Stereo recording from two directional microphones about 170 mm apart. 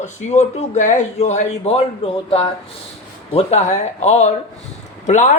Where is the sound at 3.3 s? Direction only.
35° left (ahead or behind).